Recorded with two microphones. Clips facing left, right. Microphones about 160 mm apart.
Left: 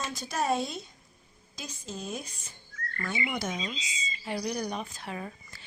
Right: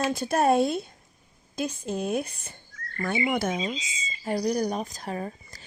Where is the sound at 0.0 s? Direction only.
55° right (ahead or behind).